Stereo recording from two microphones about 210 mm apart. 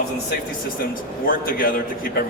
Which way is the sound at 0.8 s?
40° left (ahead or behind).